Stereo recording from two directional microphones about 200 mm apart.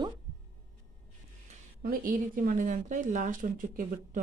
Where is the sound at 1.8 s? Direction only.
45° right (ahead or behind).